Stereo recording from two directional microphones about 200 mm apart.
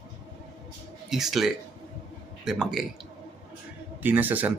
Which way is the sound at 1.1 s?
Centre (ahead or behind).